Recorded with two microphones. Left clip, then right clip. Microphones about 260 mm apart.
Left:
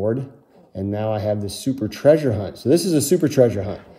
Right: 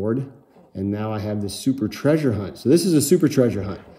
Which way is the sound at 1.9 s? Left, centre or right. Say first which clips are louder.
Left 7 dB; right.